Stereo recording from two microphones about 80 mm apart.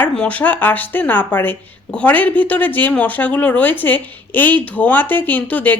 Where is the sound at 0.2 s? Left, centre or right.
Centre.